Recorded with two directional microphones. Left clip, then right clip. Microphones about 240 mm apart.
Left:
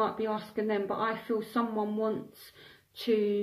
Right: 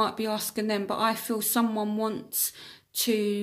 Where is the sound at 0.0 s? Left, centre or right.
Right.